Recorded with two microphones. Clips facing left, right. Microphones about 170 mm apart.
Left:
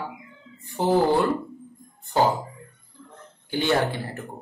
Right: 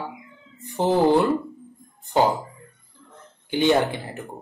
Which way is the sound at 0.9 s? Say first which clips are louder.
Right 2 dB; 20° right (ahead or behind).